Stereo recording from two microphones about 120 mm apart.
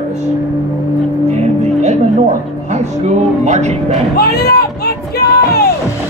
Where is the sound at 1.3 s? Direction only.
70° right (ahead or behind).